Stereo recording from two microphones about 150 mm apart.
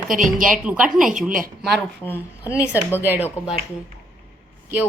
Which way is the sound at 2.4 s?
10° right (ahead or behind).